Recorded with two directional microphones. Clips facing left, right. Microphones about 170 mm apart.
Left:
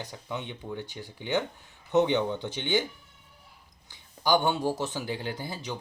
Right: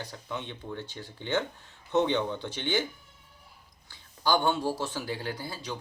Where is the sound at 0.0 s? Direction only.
15° left (ahead or behind).